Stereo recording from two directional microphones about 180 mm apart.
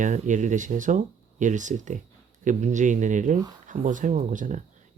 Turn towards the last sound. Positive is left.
turn(degrees=-45)  # may be behind; listen again after turning